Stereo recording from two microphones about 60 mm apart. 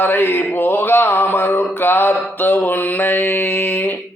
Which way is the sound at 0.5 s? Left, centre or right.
Left.